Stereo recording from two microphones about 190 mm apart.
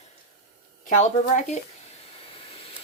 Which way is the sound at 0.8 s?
40° left (ahead or behind).